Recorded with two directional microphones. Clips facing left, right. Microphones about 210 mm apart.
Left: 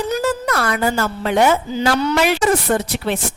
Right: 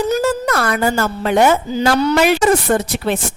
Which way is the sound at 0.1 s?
45° right (ahead or behind).